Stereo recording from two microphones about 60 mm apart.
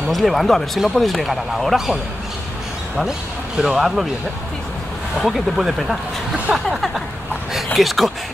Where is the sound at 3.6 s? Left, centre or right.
Centre.